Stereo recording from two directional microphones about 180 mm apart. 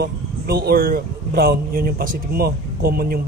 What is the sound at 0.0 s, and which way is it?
Speech, 60° right (ahead or behind).